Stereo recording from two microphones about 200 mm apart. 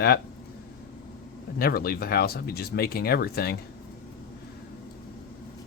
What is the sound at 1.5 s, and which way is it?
Speech, 50° left (ahead or behind).